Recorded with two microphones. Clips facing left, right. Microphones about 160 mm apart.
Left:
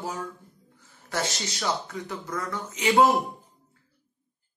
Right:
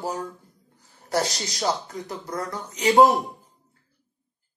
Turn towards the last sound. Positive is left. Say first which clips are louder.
# right 4 dB
turn(degrees=-40)  # may be behind; listen again after turning